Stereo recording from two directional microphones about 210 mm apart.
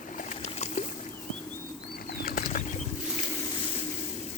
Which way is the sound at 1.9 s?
45° left (ahead or behind).